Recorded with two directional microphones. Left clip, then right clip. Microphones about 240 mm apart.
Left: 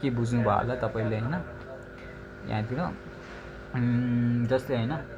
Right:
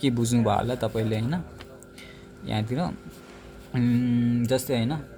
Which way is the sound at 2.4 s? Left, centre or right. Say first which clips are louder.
Right 2 dB; right.